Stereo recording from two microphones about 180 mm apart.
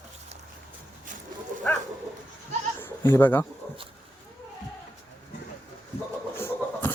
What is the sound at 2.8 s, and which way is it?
Bleat, 10° left (ahead or behind).